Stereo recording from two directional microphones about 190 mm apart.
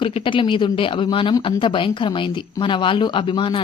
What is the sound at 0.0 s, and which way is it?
Speech, 25° left (ahead or behind).